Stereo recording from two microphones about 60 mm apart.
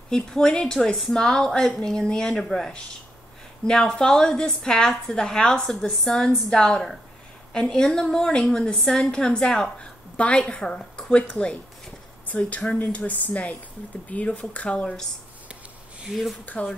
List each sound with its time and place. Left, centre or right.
0.1 s a woman's voice: centre
12.4 s speech: left
16.1 s speech: centre
16.4 s speech: left